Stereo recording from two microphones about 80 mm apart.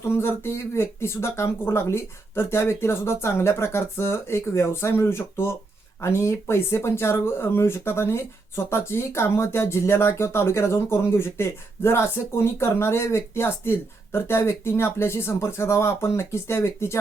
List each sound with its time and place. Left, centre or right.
0.1 s speech: left